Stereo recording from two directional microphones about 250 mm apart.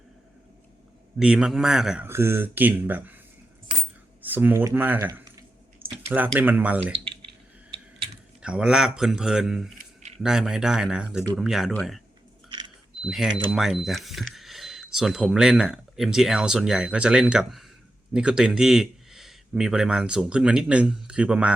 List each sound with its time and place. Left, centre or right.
1.2 s speech: centre
4.2 s speech: centre
8.4 s speech: centre
9.7 s a sound: right
10.2 s speech: centre
13.1 s speech: centre